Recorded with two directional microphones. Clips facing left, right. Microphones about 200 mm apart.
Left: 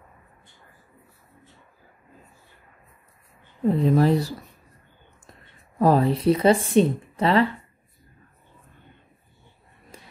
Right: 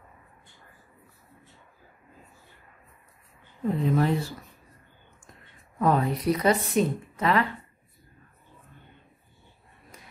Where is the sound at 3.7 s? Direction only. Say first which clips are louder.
Left 5 dB; 40° left (ahead or behind).